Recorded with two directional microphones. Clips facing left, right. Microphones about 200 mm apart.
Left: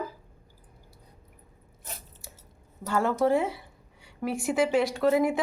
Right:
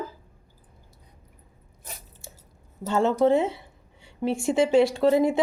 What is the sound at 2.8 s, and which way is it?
A woman's voice, 25° right (ahead or behind).